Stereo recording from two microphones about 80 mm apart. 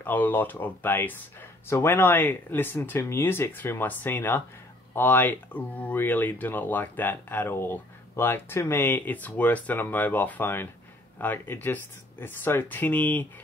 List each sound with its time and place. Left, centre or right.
0.0 s speech: left